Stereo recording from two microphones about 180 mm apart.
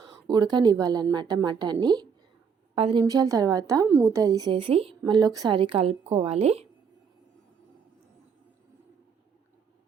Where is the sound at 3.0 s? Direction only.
20° right (ahead or behind); by 6.7 s 35° right (ahead or behind).